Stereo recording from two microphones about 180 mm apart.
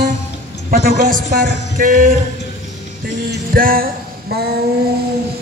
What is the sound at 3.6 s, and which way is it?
Music, 55° right (ahead or behind).